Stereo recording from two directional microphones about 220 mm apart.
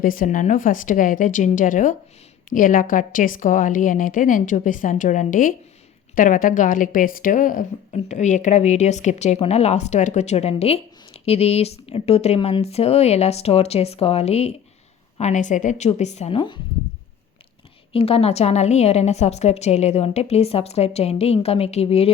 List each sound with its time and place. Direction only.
0.0 s a woman's voice: 40° left (ahead or behind); by 16.6 s 25° left (ahead or behind)
17.9 s a woman's voice: 25° left (ahead or behind)